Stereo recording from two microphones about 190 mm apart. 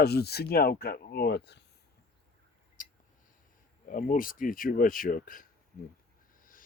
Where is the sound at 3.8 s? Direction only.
45° left (ahead or behind).